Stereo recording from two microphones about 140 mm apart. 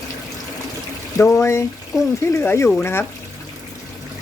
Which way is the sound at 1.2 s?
15° left (ahead or behind).